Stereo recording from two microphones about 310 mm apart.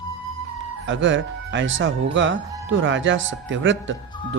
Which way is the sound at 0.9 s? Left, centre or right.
Right.